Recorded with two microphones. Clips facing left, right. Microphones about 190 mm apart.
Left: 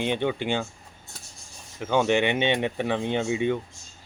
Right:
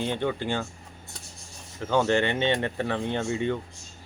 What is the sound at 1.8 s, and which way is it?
Speech, 15° left (ahead or behind).